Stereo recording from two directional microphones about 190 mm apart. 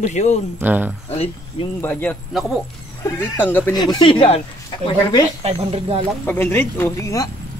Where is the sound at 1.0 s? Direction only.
30° left (ahead or behind).